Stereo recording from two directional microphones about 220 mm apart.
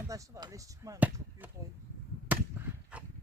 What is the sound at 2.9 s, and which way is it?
Livestock, 5° right (ahead or behind).